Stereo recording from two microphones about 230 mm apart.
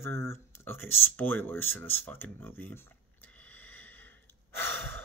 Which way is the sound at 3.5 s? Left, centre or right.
Centre.